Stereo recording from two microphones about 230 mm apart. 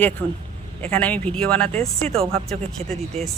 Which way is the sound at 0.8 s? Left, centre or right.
Centre.